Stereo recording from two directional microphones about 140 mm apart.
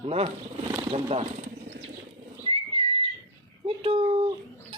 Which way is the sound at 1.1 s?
50° right (ahead or behind).